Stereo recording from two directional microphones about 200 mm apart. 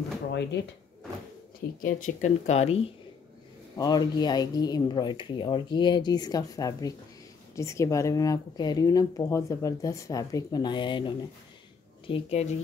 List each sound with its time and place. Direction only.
0.3 s drawer open or close: 60° left (ahead or behind)
1.8 s speech: 40° left (ahead or behind)
3.7 s speech: 20° left (ahead or behind)